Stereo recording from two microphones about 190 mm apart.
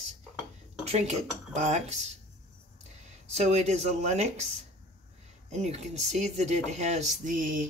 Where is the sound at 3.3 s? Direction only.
35° right (ahead or behind).